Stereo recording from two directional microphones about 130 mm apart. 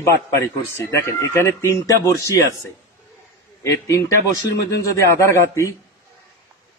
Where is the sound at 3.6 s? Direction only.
20° left (ahead or behind).